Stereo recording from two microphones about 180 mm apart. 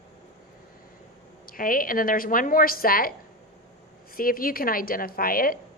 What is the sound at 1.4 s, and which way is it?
A woman's voice, 50° left (ahead or behind).